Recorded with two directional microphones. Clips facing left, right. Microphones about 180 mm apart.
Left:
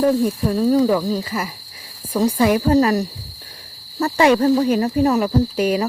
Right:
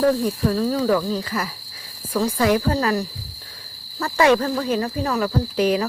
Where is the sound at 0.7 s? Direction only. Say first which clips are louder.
Left 4 dB; 15° left (ahead or behind).